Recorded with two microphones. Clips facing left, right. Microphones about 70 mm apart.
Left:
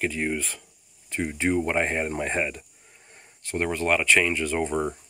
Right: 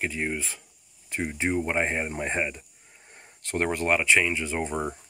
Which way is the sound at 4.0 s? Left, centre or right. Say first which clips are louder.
Left 1 dB; centre.